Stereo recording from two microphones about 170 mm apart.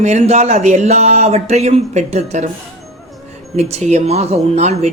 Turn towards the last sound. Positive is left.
turn(degrees=-40)  # may be behind; listen again after turning